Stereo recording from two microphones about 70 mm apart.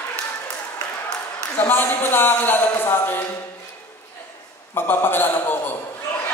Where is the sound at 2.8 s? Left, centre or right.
Left.